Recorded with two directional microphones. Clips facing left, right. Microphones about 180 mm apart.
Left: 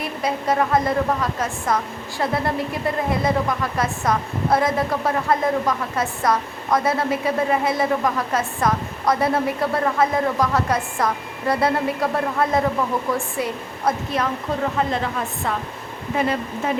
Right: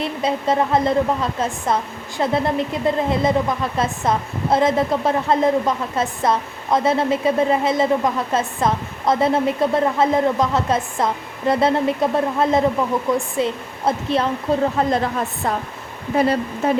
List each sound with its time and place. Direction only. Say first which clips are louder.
0.0 s a woman's voice: right 3 dB; 25° right (ahead or behind)
14.8 s speech: right 3 dB; 35° right (ahead or behind)
16.1 s speech: right 4 dB; 35° right (ahead or behind)